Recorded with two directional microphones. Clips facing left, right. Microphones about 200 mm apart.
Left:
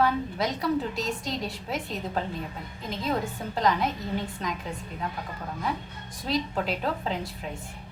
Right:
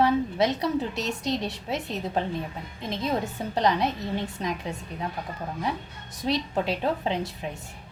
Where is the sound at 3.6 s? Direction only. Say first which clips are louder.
Right 1 dB; 25° right (ahead or behind).